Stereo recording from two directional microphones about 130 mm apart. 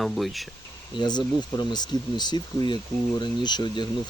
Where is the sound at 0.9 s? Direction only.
35° left (ahead or behind).